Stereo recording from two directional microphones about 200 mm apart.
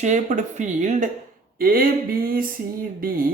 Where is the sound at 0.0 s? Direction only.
40° right (ahead or behind).